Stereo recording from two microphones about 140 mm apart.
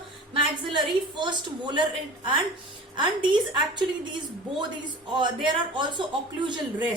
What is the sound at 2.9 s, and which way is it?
Speech, 35° right (ahead or behind).